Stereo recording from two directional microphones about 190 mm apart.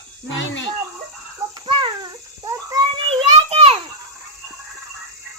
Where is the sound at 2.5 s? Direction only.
20° right (ahead or behind).